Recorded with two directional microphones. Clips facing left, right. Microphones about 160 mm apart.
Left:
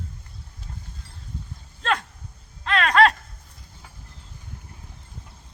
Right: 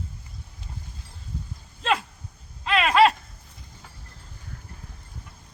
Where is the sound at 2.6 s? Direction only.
5° right (ahead or behind).